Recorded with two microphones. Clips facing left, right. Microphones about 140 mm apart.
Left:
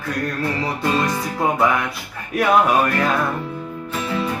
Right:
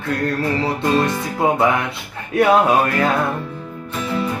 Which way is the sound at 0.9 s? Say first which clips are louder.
Right 2 dB; 25° right (ahead or behind).